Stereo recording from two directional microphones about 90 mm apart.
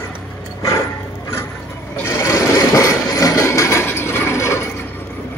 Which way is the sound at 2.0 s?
35° left (ahead or behind).